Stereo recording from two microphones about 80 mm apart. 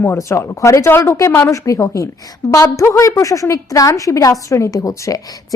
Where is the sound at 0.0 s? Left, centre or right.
Left.